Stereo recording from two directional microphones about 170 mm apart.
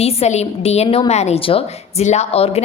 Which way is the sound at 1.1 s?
40° left (ahead or behind).